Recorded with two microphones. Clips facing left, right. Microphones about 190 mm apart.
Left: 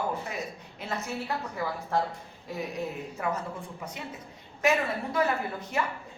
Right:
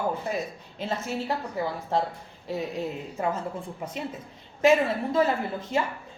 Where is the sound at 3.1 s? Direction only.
25° right (ahead or behind).